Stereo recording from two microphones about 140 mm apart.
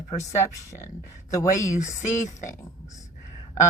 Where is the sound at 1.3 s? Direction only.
20° left (ahead or behind).